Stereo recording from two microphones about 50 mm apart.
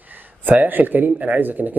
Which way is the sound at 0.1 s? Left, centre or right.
Right.